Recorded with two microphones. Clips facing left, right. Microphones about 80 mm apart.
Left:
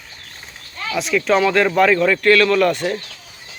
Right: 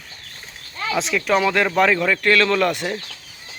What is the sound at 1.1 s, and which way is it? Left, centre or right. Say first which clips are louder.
A man's voice: left 4 dB; centre.